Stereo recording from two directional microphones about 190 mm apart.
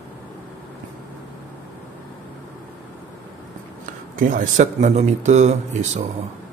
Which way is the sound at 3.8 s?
45° right (ahead or behind).